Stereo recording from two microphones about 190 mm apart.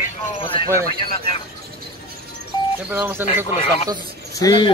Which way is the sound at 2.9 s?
10° right (ahead or behind).